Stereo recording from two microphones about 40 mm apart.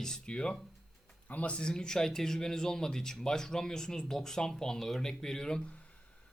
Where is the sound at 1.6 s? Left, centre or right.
Left.